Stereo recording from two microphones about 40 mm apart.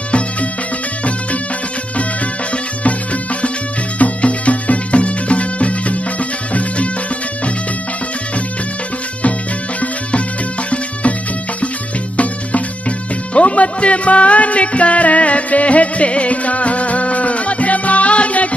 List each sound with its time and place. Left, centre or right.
2.5 s music: left
10.7 s music: left
13.3 s music: left